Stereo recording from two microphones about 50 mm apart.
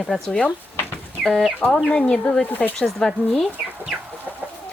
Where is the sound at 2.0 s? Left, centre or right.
Centre.